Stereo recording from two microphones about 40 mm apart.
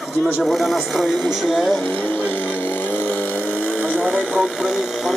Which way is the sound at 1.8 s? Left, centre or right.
Left.